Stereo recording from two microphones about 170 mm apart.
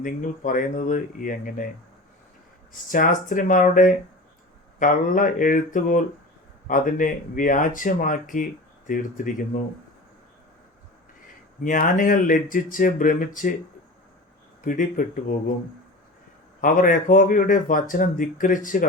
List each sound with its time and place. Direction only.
0.0 s speech: 50° left (ahead or behind)
2.9 s speech: 50° left (ahead or behind)
11.6 s speech: 55° left (ahead or behind)
14.6 s speech: 50° left (ahead or behind)
16.6 s speech: 55° left (ahead or behind)